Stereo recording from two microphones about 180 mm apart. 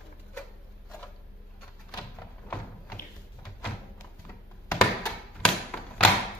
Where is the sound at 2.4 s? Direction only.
10° left (ahead or behind).